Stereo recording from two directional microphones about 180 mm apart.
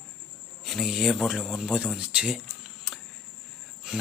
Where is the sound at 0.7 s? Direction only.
Centre (ahead or behind).